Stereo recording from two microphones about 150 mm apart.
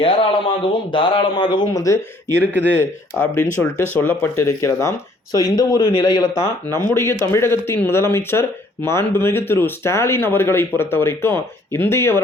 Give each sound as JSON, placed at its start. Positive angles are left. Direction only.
{"t": 0.0, "sound": "a man's voice", "side_deg": 35}